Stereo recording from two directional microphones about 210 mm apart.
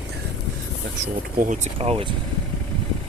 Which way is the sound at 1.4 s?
35° right (ahead or behind).